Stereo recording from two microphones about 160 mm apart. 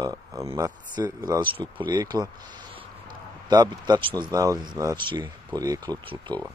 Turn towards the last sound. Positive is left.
turn(degrees=-25)  # may be behind; listen again after turning